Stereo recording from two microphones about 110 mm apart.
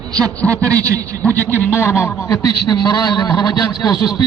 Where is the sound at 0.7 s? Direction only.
30° right (ahead or behind).